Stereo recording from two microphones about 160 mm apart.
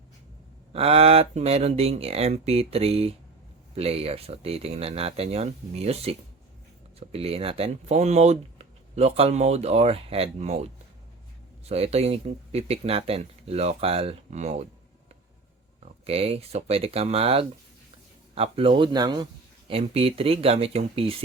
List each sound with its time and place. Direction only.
0.7 s speech: 40° right (ahead or behind)
11.7 s speech: 40° right (ahead or behind)
15.8 s speech: 40° right (ahead or behind)